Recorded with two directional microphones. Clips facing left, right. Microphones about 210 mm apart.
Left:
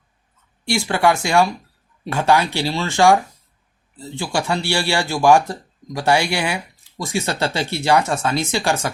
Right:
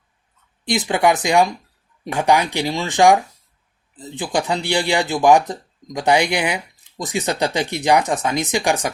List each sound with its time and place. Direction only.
0.6 s speech: 20° right (ahead or behind)